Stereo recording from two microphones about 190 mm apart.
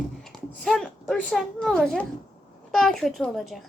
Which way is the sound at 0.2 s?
5° left (ahead or behind).